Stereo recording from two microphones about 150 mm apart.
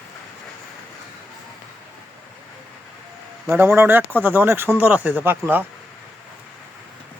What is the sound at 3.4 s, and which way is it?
Speech, 15° right (ahead or behind).